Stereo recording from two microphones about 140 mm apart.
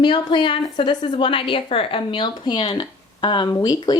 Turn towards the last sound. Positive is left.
turn(degrees=25)  # may be behind; listen again after turning